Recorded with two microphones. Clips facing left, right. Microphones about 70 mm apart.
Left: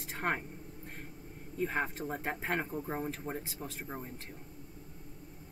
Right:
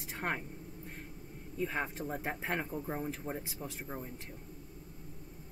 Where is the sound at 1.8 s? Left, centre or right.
Centre.